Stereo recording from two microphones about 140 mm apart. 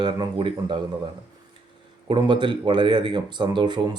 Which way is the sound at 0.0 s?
35° right (ahead or behind).